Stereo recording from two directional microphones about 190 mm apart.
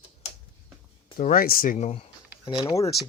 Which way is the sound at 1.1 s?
50° left (ahead or behind).